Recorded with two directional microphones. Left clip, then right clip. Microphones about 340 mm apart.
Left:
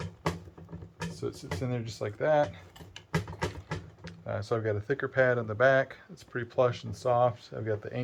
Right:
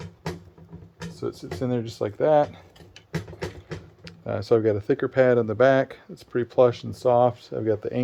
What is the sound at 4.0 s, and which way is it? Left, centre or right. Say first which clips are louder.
Speech: right 8 dB; right.